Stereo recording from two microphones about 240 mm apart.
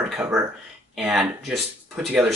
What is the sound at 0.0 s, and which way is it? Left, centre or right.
Speech, centre.